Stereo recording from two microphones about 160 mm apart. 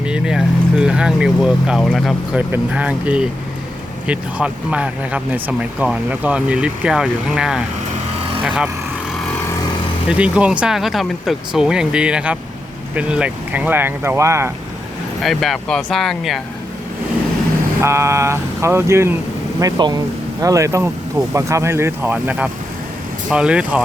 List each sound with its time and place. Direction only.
0.0 s speech: 5° right (ahead or behind)
10.1 s speech: 5° right (ahead or behind)
15.2 s speech: centre (ahead or behind)
17.8 s speech: 15° right (ahead or behind)